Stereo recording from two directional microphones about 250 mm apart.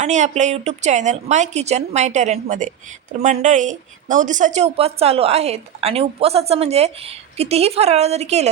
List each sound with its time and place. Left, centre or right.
0.0 s a woman's voice: right